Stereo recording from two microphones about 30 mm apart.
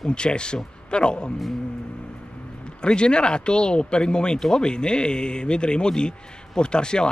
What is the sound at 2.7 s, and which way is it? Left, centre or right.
A man's voice, left.